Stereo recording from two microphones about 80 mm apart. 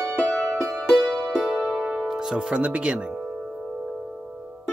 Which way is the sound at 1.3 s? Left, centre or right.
Centre.